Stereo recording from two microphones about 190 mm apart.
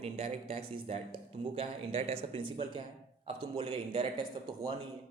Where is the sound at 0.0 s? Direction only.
30° right (ahead or behind).